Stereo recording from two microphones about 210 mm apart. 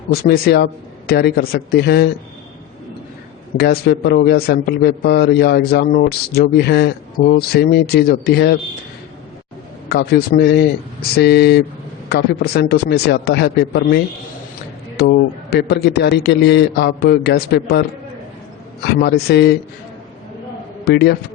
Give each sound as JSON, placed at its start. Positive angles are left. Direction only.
{"t": 0.1, "sound": "a man's voice", "side_deg": 50}
{"t": 3.6, "sound": "a man's voice", "side_deg": 50}
{"t": 9.9, "sound": "a man's voice", "side_deg": 50}
{"t": 20.8, "sound": "a man's voice", "side_deg": 50}